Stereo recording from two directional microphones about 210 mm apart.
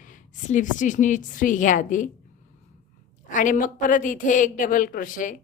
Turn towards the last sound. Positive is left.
turn(degrees=40)  # may be behind; listen again after turning